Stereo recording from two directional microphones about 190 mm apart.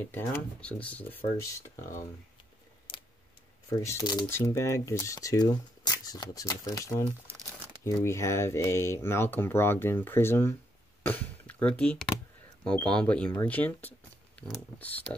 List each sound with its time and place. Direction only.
0.1 s speech: 10° left (ahead or behind)
3.8 s speech: 20° left (ahead or behind)